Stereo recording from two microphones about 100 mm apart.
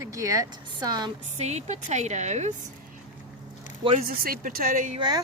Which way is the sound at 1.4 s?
90° right.